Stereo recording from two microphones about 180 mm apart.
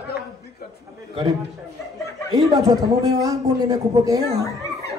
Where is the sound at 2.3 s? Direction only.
20° right (ahead or behind).